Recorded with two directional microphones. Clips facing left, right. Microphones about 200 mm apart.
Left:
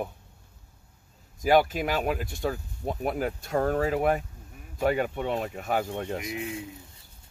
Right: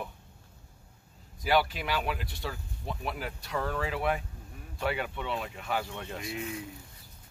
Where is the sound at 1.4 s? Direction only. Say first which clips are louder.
Left 6 dB; 45° left (ahead or behind).